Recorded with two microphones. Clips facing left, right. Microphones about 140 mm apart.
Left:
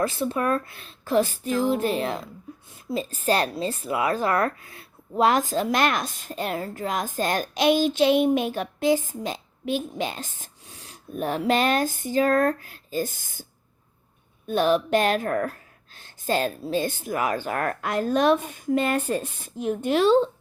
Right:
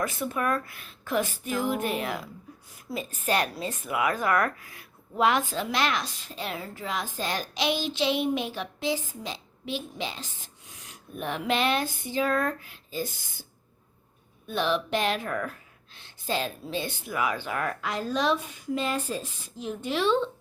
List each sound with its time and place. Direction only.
0.0 s a woman's voice: 30° left (ahead or behind); by 10.5 s 50° left (ahead or behind)
10.7 s speech: 35° left (ahead or behind)